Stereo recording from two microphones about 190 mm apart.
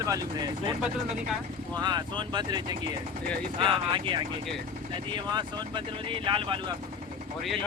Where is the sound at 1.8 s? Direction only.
20° right (ahead or behind).